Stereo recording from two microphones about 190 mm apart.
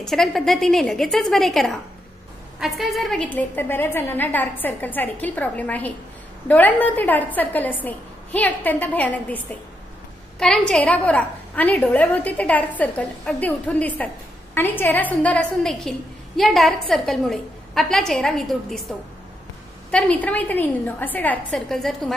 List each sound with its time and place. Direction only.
0.0 s a woman's voice: centre (ahead or behind)
19.9 s a woman's voice: 5° left (ahead or behind)